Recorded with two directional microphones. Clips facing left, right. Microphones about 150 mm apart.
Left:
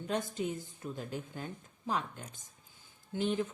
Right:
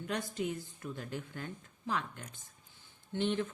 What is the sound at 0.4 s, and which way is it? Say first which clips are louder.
A woman's voice: even; 25° left (ahead or behind).